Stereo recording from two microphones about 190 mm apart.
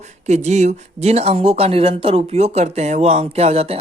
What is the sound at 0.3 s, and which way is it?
Speech, 35° right (ahead or behind).